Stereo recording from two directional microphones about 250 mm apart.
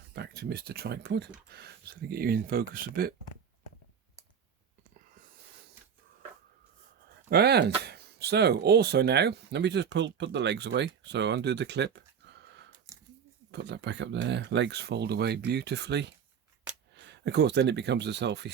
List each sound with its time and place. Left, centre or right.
0.1 s speech: right
7.3 s speech: right